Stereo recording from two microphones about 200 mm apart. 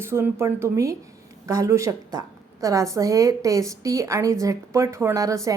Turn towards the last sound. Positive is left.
turn(degrees=-15)  # may be behind; listen again after turning